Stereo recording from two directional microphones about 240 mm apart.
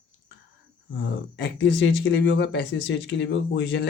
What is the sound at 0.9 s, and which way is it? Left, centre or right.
Speech, left.